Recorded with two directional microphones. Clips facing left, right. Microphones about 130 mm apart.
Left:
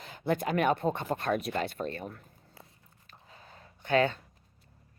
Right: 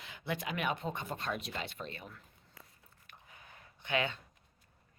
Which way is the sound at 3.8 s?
45° left (ahead or behind).